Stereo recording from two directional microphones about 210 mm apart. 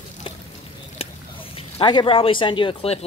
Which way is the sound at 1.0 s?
25° left (ahead or behind).